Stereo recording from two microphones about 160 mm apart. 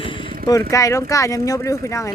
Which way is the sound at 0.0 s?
30° left (ahead or behind).